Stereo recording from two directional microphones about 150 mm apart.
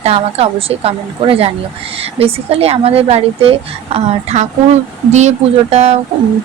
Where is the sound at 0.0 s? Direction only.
40° right (ahead or behind).